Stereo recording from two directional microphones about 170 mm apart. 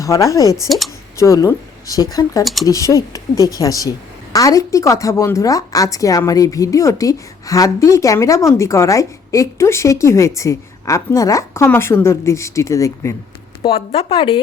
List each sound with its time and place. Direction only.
0.0 s a woman's voice: 20° left (ahead or behind)
2.4 s speech: centre (ahead or behind)
2.6 s a woman's voice: 20° left (ahead or behind)
13.6 s speech: 35° left (ahead or behind)